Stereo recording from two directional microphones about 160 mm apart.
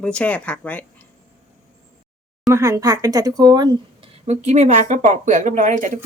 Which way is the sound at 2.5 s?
20° right (ahead or behind).